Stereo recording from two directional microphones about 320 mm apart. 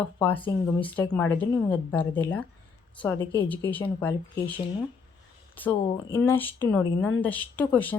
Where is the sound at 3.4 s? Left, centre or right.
Centre.